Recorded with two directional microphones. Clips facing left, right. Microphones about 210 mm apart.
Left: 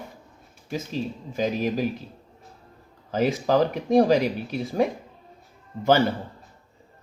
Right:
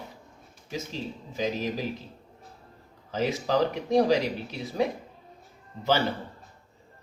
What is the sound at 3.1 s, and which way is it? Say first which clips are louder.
Speech: left 4 dB; 50° left (ahead or behind).